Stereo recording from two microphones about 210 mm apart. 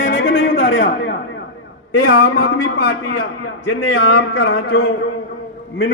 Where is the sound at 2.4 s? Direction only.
50° left (ahead or behind).